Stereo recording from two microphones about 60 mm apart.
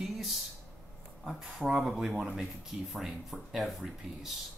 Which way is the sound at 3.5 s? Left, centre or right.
Centre.